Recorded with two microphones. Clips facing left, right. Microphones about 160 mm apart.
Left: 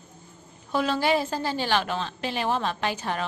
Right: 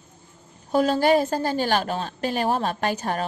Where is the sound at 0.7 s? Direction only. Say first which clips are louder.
Right 5 dB; 45° right (ahead or behind).